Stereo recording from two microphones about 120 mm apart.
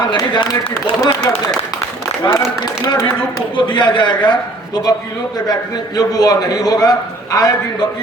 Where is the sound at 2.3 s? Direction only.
30° left (ahead or behind).